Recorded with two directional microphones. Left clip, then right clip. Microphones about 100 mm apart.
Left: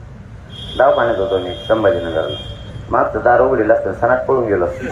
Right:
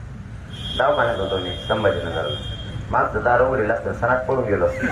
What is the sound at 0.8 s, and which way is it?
A man's voice, 50° left (ahead or behind).